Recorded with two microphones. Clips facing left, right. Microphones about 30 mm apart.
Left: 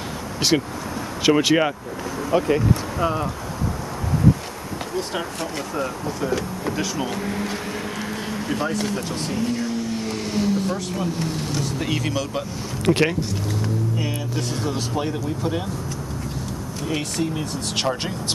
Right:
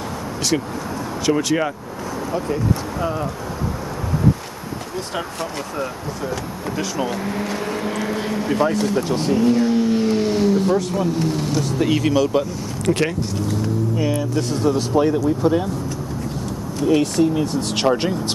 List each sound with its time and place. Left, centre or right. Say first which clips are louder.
1.2 s speech: left 2 dB; left
3.0 s speech: left 1 dB; centre
4.9 s speech: even; centre
8.0 s vehicle: right 5 dB; centre
8.9 s speech: right 7 dB; centre
12.8 s speech: left 1 dB; centre
13.5 s speech: right 3 dB; centre
16.8 s speech: right 9 dB; centre